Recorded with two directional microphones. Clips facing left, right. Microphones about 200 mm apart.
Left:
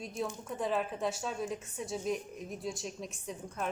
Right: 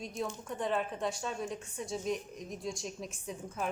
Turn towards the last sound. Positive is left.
turn(degrees=0)  # may be behind; listen again after turning